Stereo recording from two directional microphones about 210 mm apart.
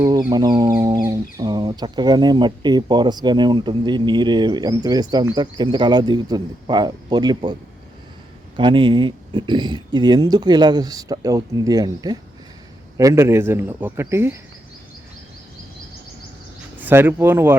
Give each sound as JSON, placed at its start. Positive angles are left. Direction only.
{"t": 0.3, "sound": "speech", "side_deg": -20}
{"t": 8.5, "sound": "a man's voice", "side_deg": -25}
{"t": 16.7, "sound": "speech", "side_deg": -10}